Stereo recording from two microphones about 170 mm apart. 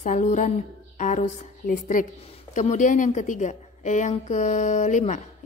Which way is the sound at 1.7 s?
50° left (ahead or behind).